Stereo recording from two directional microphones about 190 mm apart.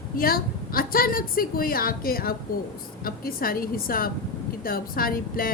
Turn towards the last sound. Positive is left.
turn(degrees=50)  # may be behind; listen again after turning